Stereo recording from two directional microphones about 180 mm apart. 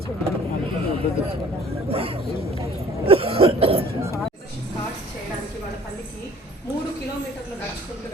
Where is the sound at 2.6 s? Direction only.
30° right (ahead or behind).